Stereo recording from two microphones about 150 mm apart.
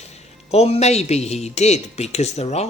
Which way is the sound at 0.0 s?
45° left (ahead or behind).